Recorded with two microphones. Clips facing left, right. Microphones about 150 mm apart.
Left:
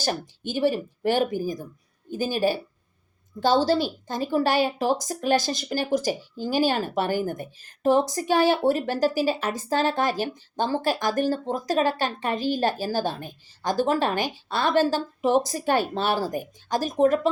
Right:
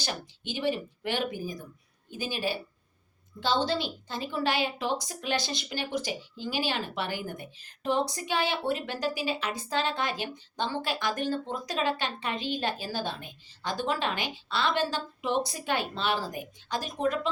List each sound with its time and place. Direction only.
0.0 s a woman's voice: 45° left (ahead or behind)